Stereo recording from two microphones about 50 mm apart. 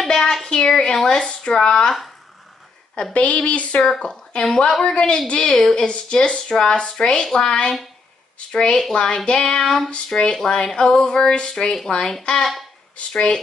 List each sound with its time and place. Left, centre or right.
0.1 s speech: centre
3.0 s a woman's voice: left
3.8 s speech: centre
4.6 s a woman's voice: centre
4.9 s a woman's voice: centre